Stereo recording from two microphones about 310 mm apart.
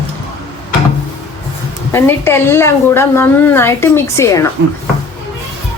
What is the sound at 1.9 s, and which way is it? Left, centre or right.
A woman's voice, centre.